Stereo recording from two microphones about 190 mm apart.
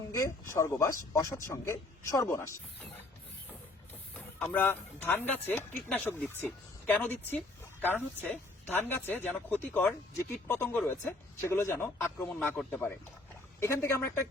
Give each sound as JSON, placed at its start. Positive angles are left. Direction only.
{"t": 0.1, "sound": "speech", "side_deg": 15}
{"t": 4.4, "sound": "speech", "side_deg": 10}